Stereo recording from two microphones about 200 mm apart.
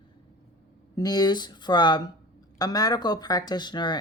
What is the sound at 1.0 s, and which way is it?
Speech, 20° left (ahead or behind).